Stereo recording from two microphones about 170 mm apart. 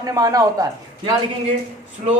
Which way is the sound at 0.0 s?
20° right (ahead or behind).